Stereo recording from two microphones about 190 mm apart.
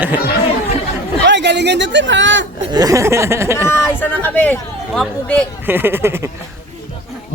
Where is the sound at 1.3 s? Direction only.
65° right (ahead or behind).